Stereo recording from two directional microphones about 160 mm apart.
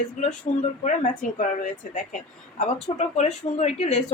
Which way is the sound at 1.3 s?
50° left (ahead or behind).